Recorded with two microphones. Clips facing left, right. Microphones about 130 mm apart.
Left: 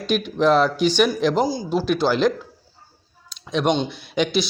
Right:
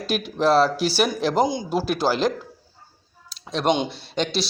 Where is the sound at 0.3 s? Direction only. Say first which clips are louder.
Left 1 dB; 35° right (ahead or behind).